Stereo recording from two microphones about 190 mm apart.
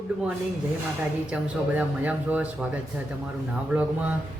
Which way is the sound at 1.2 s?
5° right (ahead or behind).